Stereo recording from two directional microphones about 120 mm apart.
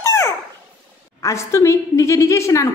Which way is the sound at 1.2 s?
25° left (ahead or behind).